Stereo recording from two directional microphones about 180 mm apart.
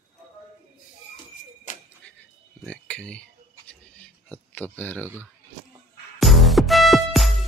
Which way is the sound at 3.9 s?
5° left (ahead or behind).